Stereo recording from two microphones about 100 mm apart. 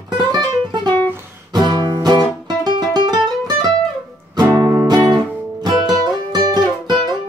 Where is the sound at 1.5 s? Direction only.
45° right (ahead or behind).